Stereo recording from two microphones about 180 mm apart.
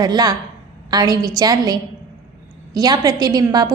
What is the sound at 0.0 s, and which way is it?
A woman's voice, 20° right (ahead or behind).